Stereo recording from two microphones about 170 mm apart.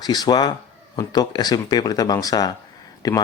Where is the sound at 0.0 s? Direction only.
25° left (ahead or behind).